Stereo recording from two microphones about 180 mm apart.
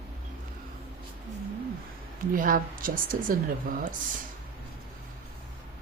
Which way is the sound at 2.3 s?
50° right (ahead or behind).